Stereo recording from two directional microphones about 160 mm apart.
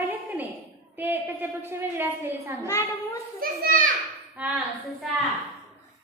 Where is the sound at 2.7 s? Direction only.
20° left (ahead or behind).